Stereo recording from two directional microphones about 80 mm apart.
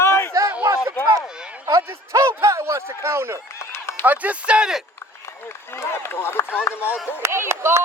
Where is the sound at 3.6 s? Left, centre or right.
Left.